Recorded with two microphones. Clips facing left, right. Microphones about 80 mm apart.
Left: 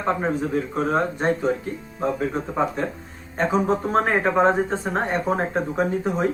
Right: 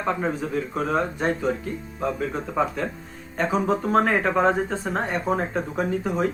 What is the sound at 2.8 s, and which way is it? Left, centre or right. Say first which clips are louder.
Speech: left 2 dB; left.